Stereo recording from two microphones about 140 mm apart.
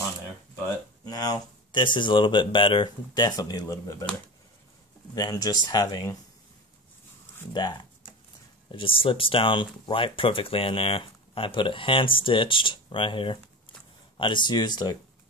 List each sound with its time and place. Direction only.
0.7 s speech: 30° left (ahead or behind)
5.1 s speech: 30° left (ahead or behind)
7.5 s speech: 30° left (ahead or behind)